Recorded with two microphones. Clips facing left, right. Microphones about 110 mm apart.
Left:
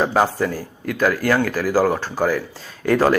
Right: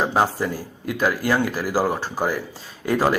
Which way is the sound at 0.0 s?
5° right (ahead or behind).